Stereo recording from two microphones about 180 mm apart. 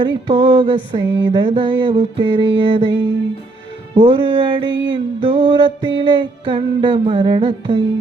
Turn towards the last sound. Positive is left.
turn(degrees=-30)  # may be behind; listen again after turning